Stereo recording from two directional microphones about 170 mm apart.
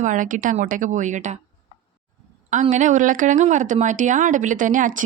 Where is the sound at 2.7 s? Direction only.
45° right (ahead or behind).